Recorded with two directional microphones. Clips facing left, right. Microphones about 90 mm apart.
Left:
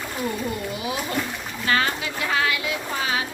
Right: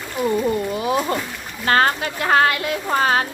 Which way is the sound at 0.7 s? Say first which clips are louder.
Right 8 dB; 45° right (ahead or behind).